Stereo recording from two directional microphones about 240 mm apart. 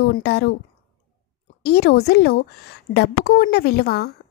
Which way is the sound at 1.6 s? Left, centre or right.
Left.